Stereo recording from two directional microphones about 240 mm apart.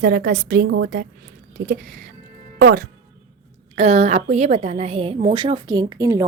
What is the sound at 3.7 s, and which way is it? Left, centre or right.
A woman's voice, right.